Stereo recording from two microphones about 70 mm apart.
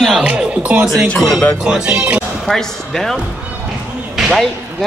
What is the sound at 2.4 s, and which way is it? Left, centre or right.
Speech, centre.